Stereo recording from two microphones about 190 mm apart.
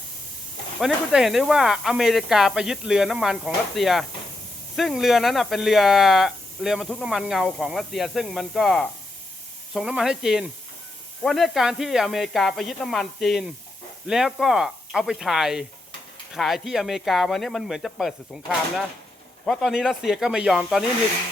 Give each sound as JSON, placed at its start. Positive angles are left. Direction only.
{"t": 0.8, "sound": "speech", "side_deg": 0}